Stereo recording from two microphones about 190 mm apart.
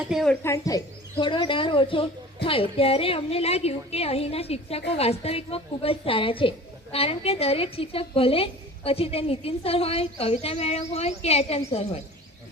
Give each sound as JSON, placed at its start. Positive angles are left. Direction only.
{"t": 0.1, "sound": "speech", "side_deg": 0}
{"t": 0.4, "sound": "a woman's voice", "side_deg": 15}